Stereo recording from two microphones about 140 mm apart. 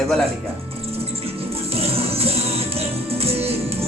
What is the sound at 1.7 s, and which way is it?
Music, 45° right (ahead or behind).